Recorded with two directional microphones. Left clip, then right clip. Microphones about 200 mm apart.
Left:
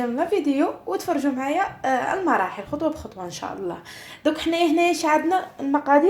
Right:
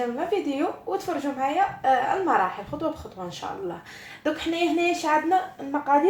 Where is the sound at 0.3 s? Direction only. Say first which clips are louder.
Left 4 dB; 45° left (ahead or behind).